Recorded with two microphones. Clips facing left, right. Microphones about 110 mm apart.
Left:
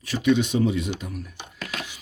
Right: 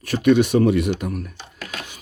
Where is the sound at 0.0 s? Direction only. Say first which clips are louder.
Right 5 dB; 55° right (ahead or behind).